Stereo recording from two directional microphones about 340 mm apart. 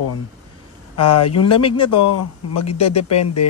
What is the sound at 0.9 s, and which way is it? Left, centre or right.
Speech, left.